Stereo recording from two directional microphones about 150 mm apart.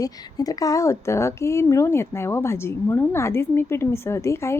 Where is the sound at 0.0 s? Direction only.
25° left (ahead or behind).